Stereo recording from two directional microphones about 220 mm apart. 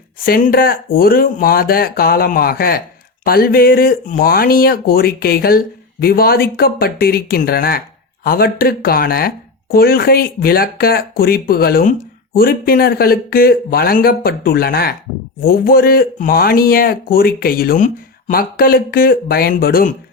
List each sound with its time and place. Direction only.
0.3 s speech: 40° left (ahead or behind)